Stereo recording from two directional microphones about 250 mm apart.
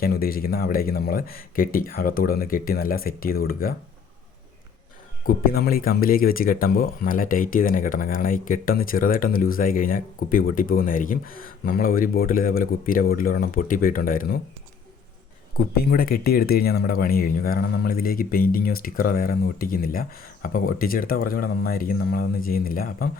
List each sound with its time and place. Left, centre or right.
0.0 s speech: left
5.2 s speech: left
15.5 s speech: left